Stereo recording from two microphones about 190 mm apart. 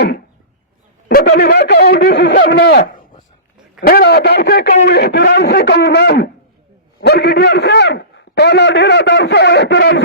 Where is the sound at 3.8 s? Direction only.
55° left (ahead or behind).